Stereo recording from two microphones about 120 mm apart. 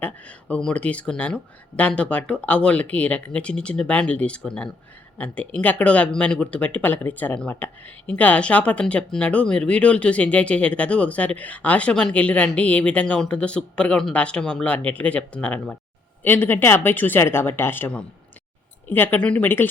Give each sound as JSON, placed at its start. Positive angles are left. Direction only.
{"t": 0.0, "sound": "speech", "side_deg": 10}